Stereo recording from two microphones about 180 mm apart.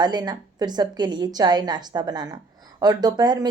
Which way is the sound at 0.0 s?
25° right (ahead or behind).